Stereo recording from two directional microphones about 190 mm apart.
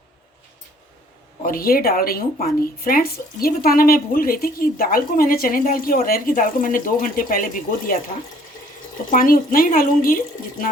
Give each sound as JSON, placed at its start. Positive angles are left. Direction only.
{"t": 1.4, "sound": "speech", "side_deg": 50}
{"t": 9.0, "sound": "speech", "side_deg": 50}